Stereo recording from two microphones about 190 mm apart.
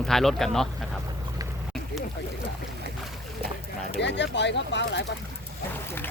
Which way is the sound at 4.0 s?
65° left (ahead or behind).